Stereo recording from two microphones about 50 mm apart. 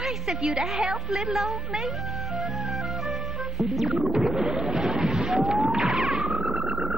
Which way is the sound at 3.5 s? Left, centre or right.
Centre.